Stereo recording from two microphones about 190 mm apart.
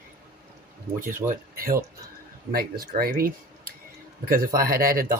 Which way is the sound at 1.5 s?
50° right (ahead or behind).